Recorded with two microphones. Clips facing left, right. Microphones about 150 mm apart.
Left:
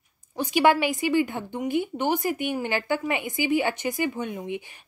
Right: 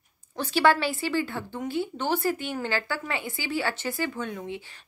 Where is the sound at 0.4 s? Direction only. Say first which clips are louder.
Left 2 dB; 15° left (ahead or behind).